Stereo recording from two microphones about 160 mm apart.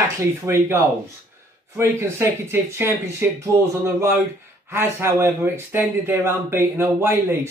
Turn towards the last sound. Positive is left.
turn(degrees=-15)  # may be behind; listen again after turning